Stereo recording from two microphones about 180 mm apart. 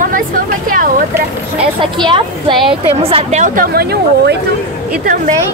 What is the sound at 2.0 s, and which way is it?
A woman's voice, 25° right (ahead or behind).